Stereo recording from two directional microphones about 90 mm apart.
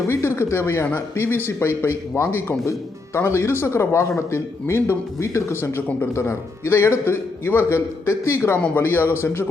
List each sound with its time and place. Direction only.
0.1 s a man's voice: 30° left (ahead or behind)